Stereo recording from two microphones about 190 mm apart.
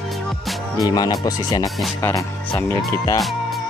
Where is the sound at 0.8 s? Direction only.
20° left (ahead or behind).